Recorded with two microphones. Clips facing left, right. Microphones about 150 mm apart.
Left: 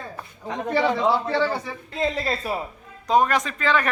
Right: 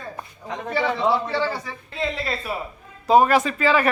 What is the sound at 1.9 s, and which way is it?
Speech, 40° left (ahead or behind).